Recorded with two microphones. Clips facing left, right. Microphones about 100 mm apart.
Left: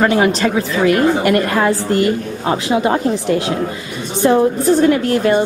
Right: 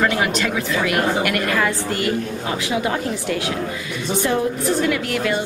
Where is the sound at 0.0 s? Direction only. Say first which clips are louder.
Left 6 dB; 30° left (ahead or behind).